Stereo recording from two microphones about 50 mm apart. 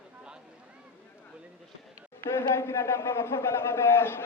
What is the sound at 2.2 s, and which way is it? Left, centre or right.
A man's voice, left.